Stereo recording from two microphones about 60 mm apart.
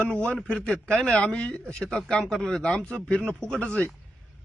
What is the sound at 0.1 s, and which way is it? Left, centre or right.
Speech, centre.